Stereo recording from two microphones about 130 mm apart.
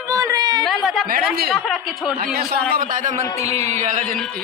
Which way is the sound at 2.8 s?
85° right.